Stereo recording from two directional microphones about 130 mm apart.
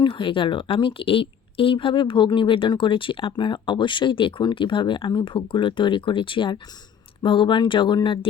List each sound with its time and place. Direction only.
0.0 s a woman's voice: 40° left (ahead or behind)